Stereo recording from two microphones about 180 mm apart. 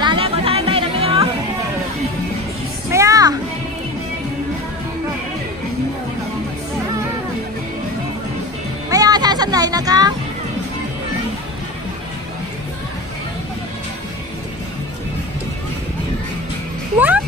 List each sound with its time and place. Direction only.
0.0 s music: 30° right (ahead or behind)
2.9 s children playing: 20° right (ahead or behind)
8.9 s music: 20° right (ahead or behind)